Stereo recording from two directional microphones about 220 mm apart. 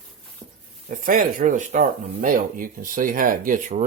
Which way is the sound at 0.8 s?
40° right (ahead or behind).